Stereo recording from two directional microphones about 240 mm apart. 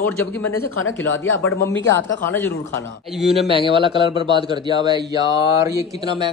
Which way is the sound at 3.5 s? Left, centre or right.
Right.